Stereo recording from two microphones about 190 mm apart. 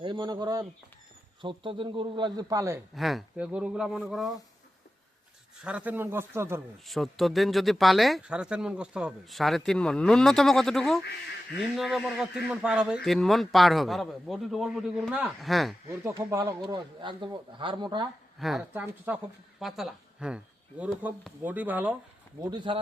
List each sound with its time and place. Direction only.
0.0 s speech: 25° right (ahead or behind)
2.9 s speech: centre (ahead or behind)
5.6 s speech: 5° right (ahead or behind)
6.8 s speech: centre (ahead or behind)
16.0 s speech: 15° right (ahead or behind)
18.3 s speech: centre (ahead or behind)
22.4 s speech: 25° right (ahead or behind)